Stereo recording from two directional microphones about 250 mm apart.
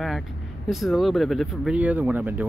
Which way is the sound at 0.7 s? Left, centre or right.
Centre.